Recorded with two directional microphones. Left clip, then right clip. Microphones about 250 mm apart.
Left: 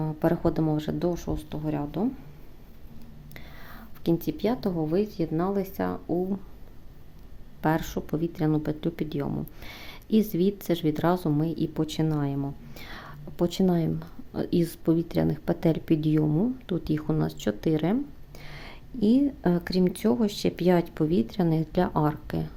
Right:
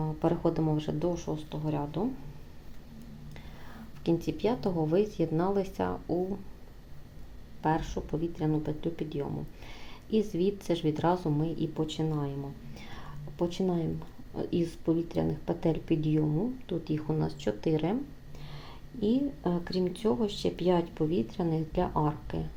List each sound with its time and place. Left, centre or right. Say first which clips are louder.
0.0 s speech: left 3 dB; centre
3.3 s speech: left 6 dB; centre
7.6 s speech: left 3 dB; left